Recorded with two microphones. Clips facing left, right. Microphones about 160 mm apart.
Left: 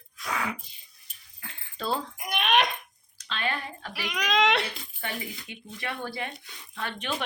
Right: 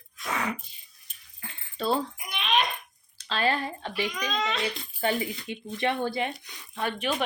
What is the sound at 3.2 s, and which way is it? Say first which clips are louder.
Speech: right 5 dB; 35° right (ahead or behind).